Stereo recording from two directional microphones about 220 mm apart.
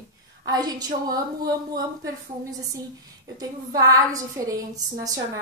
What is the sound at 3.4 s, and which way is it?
A woman's voice, 15° right (ahead or behind).